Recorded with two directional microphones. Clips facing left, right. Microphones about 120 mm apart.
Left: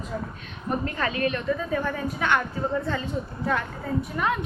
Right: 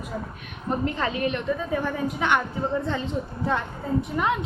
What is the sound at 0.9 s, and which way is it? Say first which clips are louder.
A woman's voice: even; 20° right (ahead or behind).